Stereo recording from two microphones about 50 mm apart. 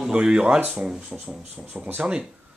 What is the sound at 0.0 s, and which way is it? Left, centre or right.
Speech, centre.